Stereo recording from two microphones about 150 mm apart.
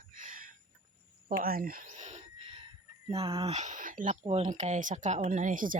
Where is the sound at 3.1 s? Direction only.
40° right (ahead or behind).